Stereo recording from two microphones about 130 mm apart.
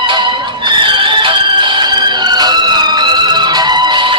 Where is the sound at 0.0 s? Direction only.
40° right (ahead or behind).